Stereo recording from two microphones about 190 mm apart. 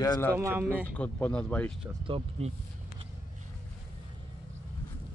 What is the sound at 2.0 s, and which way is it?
Speech, 30° right (ahead or behind).